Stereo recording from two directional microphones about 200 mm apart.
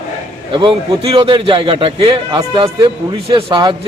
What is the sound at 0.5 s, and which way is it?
A man's voice, 25° right (ahead or behind).